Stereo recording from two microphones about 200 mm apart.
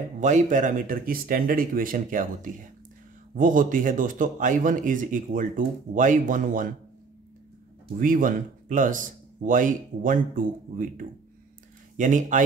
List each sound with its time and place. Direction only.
0.2 s speech: 40° right (ahead or behind)
8.0 s speech: 40° right (ahead or behind)